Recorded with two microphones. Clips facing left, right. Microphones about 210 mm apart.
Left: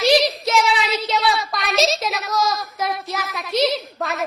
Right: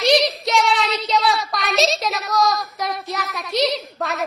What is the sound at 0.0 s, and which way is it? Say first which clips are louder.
Child singing: left 1 dB; centre (ahead or behind).